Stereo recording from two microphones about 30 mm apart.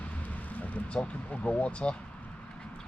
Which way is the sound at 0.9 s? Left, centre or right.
Left.